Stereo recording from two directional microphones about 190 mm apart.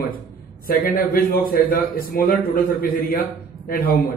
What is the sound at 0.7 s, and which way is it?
A man's voice, 50° left (ahead or behind).